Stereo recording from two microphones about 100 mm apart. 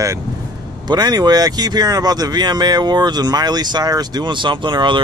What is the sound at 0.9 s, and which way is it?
Speech, 40° right (ahead or behind).